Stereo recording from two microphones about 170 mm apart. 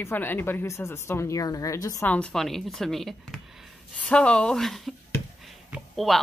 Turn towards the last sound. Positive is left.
turn(degrees=0)  # may be behind; listen again after turning